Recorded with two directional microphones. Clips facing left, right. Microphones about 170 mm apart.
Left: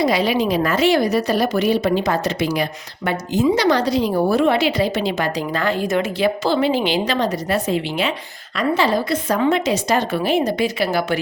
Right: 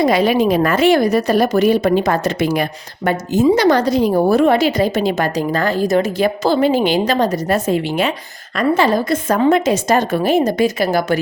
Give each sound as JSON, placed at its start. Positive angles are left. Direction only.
{"t": 0.0, "sound": "a woman's voice", "side_deg": -50}